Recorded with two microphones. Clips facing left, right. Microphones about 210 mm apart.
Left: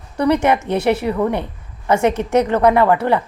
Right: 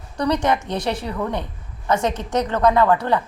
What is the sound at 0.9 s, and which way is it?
Speech, 60° left (ahead or behind).